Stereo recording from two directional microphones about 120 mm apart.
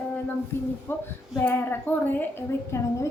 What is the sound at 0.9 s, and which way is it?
A woman's voice, 20° left (ahead or behind).